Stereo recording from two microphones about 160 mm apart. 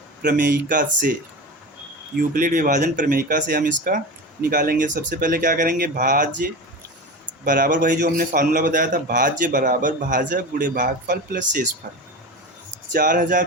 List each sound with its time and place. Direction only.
0.3 s a man's voice: 55° right (ahead or behind)
2.1 s a man's voice: 60° right (ahead or behind)
7.4 s a man's voice: 55° right (ahead or behind)
12.9 s a man's voice: 55° right (ahead or behind)